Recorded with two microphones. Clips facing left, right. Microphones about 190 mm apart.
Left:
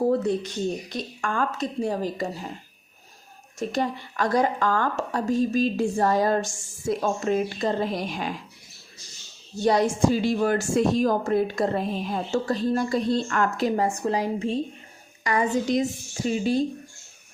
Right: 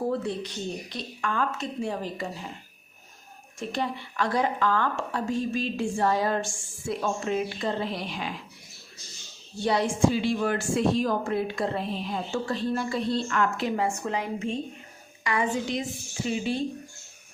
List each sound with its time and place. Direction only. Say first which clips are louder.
0.1 s a woman's voice: left 6 dB; 45° left (ahead or behind)
3.6 s a woman's voice: left 4 dB; 45° left (ahead or behind)
9.6 s a woman's voice: left 3 dB; 45° left (ahead or behind)